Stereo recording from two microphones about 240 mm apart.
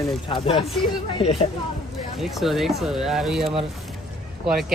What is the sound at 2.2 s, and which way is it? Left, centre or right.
Speech, centre.